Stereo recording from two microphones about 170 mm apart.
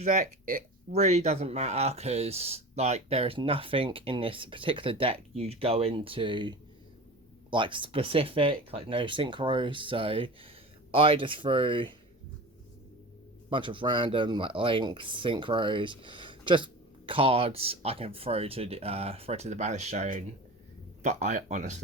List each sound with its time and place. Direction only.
0.0 s speech: 50° right (ahead or behind); by 11.9 s 30° right (ahead or behind)
13.5 s speech: 30° right (ahead or behind); by 21.8 s 45° right (ahead or behind)